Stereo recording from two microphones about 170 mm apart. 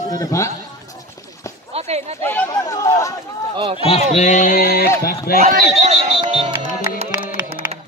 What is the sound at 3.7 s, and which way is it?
Speech, 35° left (ahead or behind).